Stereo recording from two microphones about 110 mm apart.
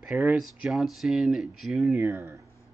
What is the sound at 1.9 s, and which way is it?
Speech, 25° right (ahead or behind).